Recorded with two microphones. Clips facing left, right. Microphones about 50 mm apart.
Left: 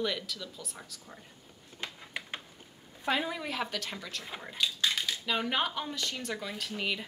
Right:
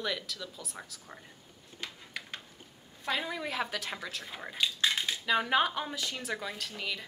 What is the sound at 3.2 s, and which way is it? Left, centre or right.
Speech, centre.